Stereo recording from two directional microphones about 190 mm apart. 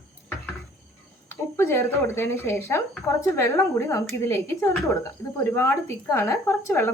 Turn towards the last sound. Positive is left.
turn(degrees=15)  # may be behind; listen again after turning